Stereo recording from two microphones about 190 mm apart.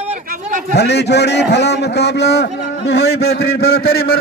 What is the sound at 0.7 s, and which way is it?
A man's voice, 60° left (ahead or behind).